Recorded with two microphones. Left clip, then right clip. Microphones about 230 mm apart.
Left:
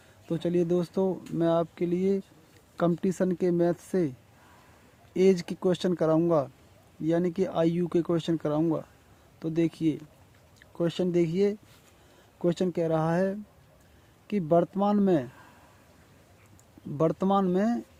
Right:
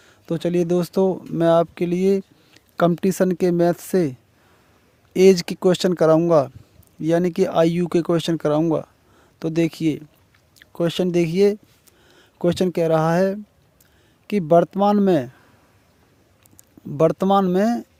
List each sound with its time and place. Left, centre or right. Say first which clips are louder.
0.3 s speech: right 6 dB; right
5.1 s speech: right 9 dB; right
17.0 s speech: right 9 dB; right